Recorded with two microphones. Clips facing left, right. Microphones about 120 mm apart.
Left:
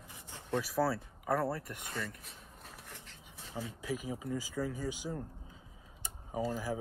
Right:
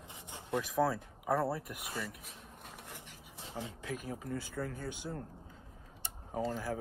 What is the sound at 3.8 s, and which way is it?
Speech, 5° left (ahead or behind).